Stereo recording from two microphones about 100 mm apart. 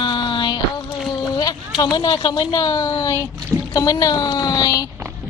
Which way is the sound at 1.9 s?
45° left (ahead or behind).